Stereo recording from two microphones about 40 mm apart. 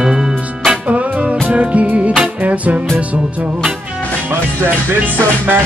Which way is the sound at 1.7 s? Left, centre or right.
Right.